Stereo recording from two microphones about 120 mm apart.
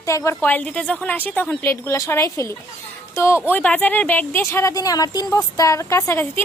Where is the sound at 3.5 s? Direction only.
10° left (ahead or behind).